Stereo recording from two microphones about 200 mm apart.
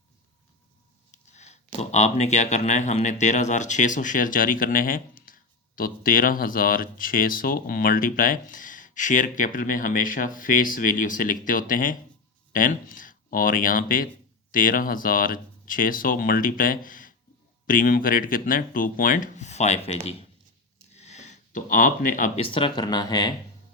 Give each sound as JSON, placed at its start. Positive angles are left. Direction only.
{"t": 1.1, "sound": "speech", "side_deg": 35}
{"t": 20.9, "sound": "a sound", "side_deg": 35}
{"t": 22.4, "sound": "speech", "side_deg": 25}